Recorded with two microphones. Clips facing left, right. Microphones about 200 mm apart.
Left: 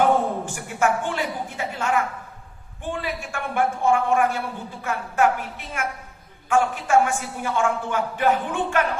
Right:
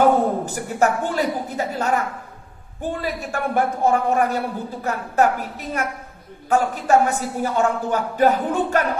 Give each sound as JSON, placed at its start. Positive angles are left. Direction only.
{"t": 0.0, "sound": "a woman's voice", "side_deg": -40}